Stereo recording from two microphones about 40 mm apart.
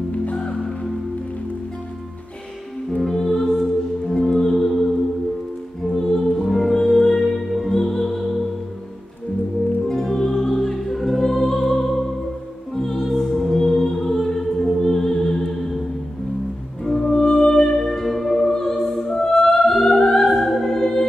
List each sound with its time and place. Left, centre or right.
0.1 s music: left
3.0 s music: centre
9.8 s music: centre
16.8 s music: centre
18.5 s opera: centre
19.7 s music: centre
20.1 s opera: centre